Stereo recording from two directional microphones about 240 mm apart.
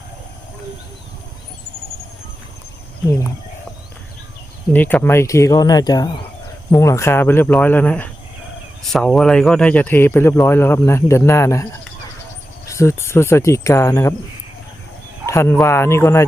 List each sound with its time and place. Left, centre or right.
4.7 s speech: centre
15.3 s speech: centre